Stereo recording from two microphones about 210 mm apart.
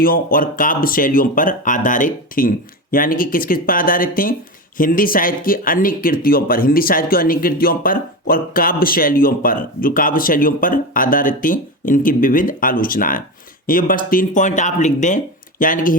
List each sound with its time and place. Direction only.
0.0 s speech: 45° left (ahead or behind)